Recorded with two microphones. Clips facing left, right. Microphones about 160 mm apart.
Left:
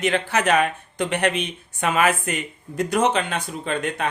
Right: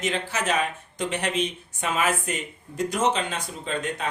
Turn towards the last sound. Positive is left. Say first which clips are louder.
# left 4 dB
turn(degrees=65)  # may be behind; listen again after turning